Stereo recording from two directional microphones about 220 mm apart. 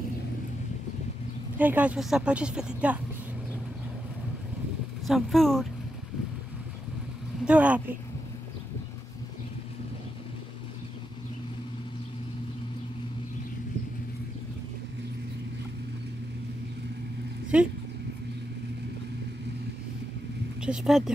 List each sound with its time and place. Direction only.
1.6 s speech: 5° right (ahead or behind)
5.0 s speech: centre (ahead or behind)
7.4 s speech: 5° right (ahead or behind)
17.5 s speech: 5° right (ahead or behind)
20.6 s speech: centre (ahead or behind)